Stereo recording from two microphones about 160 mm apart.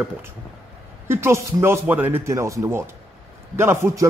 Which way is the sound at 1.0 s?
15° right (ahead or behind).